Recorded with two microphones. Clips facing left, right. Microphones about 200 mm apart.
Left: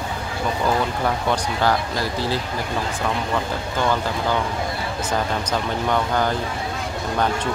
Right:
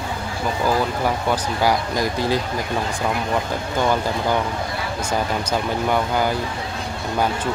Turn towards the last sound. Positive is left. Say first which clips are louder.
# right 1 dB
turn(degrees=-10)  # may be behind; listen again after turning